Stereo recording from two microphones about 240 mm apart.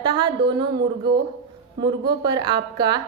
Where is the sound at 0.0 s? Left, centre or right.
Centre.